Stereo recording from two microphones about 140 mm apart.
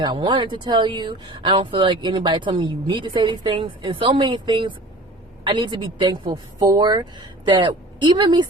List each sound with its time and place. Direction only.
0.0 s speech: 35° right (ahead or behind)